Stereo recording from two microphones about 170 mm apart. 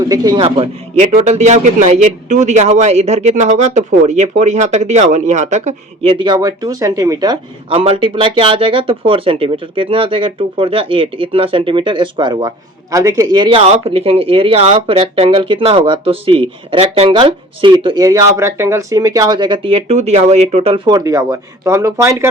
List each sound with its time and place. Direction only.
0.0 s speech: 25° right (ahead or behind)
7.7 s speech: 35° right (ahead or behind); by 22.3 s 15° right (ahead or behind)